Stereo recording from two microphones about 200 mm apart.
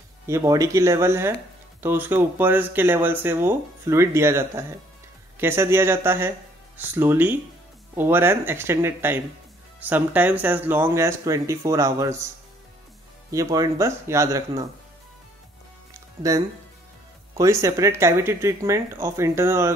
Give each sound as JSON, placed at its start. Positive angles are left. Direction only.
{"t": 0.3, "sound": "speech", "side_deg": -15}
{"t": 13.3, "sound": "speech", "side_deg": -15}
{"t": 15.9, "sound": "music", "side_deg": -15}
{"t": 17.4, "sound": "speech", "side_deg": -15}